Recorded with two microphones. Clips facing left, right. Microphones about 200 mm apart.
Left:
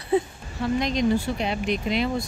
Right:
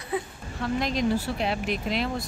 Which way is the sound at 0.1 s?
25° left (ahead or behind).